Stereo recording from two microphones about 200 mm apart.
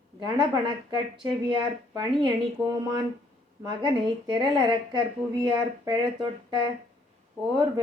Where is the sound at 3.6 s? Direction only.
20° right (ahead or behind).